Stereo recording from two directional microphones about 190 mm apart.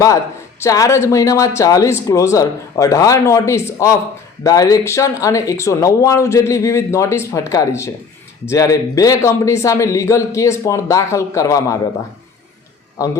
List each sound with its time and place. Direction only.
0.6 s speech: 15° left (ahead or behind)